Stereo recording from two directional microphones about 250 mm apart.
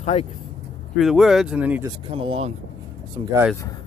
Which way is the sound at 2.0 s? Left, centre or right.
Right.